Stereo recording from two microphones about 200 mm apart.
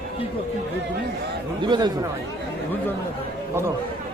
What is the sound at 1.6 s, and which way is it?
Speech, 20° right (ahead or behind).